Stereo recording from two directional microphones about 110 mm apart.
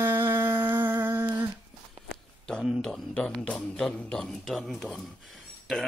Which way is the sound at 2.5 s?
10° left (ahead or behind).